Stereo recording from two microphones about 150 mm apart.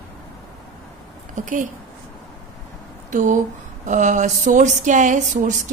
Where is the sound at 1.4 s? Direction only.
60° right (ahead or behind).